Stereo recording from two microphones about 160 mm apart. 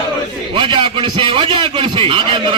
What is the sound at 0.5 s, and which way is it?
A man's voice, 30° right (ahead or behind).